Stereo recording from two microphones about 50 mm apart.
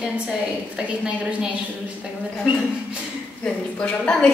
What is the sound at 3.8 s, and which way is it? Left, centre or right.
Speech, left.